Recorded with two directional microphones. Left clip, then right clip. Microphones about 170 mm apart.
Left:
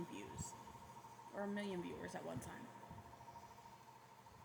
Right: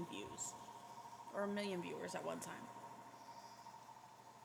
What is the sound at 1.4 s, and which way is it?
Speech, 25° right (ahead or behind).